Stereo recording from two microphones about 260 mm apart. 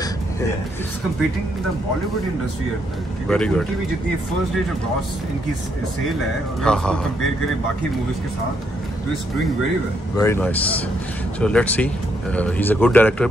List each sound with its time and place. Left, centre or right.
3.3 s speech: centre
6.6 s speech: centre
10.1 s a man's voice: centre